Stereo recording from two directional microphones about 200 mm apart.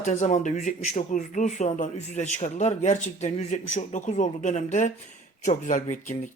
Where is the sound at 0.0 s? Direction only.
35° left (ahead or behind).